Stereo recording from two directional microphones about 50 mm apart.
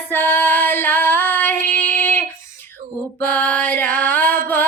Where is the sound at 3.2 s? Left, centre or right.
Left.